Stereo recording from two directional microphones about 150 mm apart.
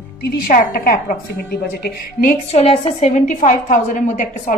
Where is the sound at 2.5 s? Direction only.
40° left (ahead or behind); by 4.6 s 60° left (ahead or behind).